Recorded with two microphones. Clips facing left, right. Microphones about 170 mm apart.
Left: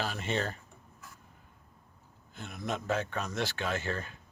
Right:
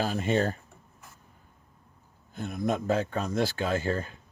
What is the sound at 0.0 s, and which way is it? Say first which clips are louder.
Speech: right 7 dB; 40° right (ahead or behind).